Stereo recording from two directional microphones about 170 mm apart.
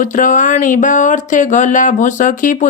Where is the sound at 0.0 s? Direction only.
50° left (ahead or behind).